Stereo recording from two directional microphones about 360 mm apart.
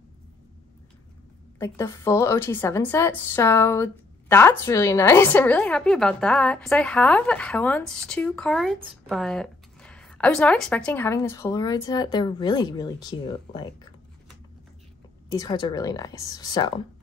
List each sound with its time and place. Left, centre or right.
1.6 s a woman's voice: centre
15.3 s speech: centre